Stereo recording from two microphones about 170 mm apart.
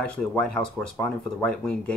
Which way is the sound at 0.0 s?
5° left (ahead or behind).